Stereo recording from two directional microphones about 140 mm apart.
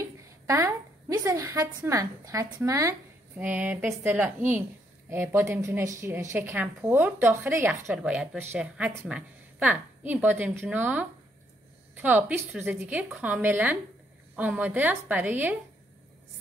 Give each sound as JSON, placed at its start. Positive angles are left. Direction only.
{"t": 0.0, "sound": "a woman's voice", "side_deg": -20}